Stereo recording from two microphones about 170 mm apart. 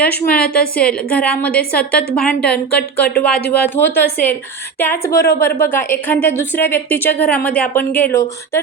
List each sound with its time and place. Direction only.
0.0 s a woman's voice: 10° left (ahead or behind)
0.4 s a woman's voice: 60° left (ahead or behind)
0.8 s a woman's voice: 5° left (ahead or behind)